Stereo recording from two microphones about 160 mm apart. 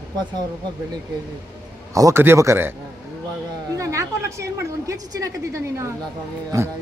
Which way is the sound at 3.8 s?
20° right (ahead or behind).